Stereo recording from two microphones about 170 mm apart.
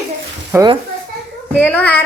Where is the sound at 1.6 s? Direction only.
10° left (ahead or behind).